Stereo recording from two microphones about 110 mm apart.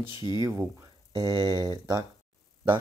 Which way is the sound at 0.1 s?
45° left (ahead or behind).